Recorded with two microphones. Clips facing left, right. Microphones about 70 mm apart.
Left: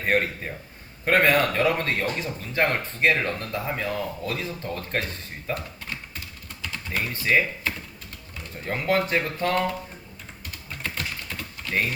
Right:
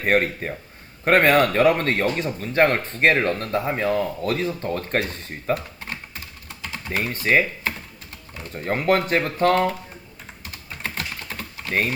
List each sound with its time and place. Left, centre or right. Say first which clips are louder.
0.0 s speech: right 3 dB; right
5.5 s typing: right 6 dB; right
6.6 s speech: right 3 dB; right
10.8 s typing: right 2 dB; right